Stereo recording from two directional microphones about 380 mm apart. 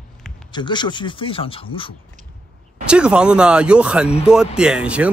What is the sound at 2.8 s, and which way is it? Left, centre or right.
Speech, centre.